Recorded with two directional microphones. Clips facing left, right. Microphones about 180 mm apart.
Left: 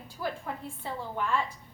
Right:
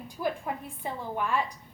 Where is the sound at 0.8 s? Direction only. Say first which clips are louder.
Right 2 dB; 15° right (ahead or behind).